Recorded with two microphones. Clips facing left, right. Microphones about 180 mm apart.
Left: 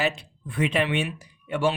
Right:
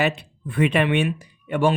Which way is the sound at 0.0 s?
60° right (ahead or behind).